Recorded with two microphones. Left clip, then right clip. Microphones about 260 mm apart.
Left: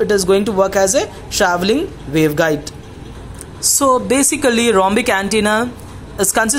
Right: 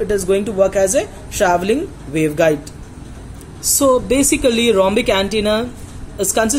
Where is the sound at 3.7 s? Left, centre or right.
Centre.